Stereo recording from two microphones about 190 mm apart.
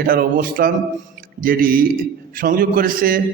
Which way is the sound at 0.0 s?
50° right (ahead or behind).